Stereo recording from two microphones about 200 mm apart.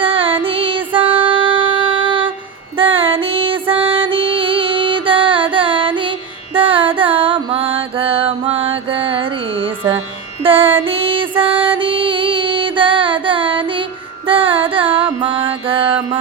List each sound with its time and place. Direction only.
0.0 s music: 25° right (ahead or behind)
14.3 s carnatic music: 25° right (ahead or behind)
14.8 s music: 10° right (ahead or behind)
15.2 s music: 25° right (ahead or behind)